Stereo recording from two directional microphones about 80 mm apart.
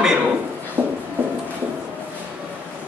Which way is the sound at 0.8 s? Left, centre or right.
Centre.